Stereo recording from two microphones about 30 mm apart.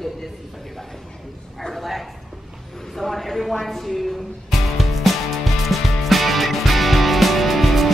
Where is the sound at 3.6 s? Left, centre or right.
Centre.